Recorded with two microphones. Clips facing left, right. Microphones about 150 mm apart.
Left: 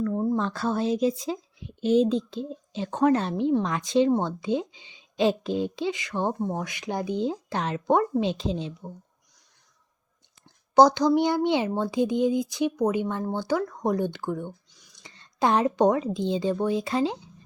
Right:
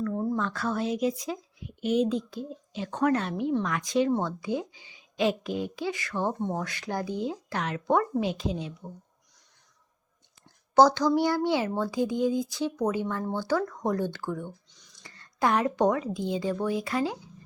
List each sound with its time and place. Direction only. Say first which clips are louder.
0.0 s a sound: left 3 dB; 20° left (ahead or behind)
0.3 s a woman's voice: left 3 dB; 30° left (ahead or behind)
10.8 s a woman's voice: left 2 dB; 15° left (ahead or behind)
14.7 s a woman's voice: left 1 dB; 10° left (ahead or behind)